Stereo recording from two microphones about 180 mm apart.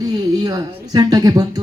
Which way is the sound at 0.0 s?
20° right (ahead or behind).